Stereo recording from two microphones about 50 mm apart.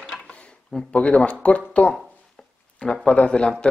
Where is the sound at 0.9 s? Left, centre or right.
Left.